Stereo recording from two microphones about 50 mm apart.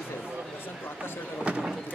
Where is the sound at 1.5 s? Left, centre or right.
Right.